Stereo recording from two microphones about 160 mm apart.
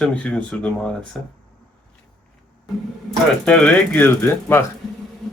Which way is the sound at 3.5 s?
10° left (ahead or behind).